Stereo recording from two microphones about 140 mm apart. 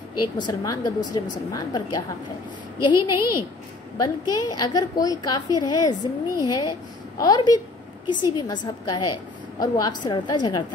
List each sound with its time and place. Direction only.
0.4 s a woman's voice: 30° left (ahead or behind)